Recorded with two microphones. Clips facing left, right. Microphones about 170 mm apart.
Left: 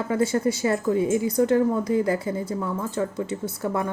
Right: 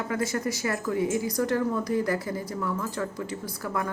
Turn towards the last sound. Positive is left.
turn(degrees=25)  # may be behind; listen again after turning